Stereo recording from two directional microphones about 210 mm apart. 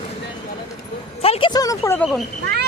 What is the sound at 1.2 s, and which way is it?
Speech, 25° left (ahead or behind).